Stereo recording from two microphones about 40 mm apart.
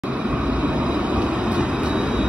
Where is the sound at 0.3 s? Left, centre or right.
Right.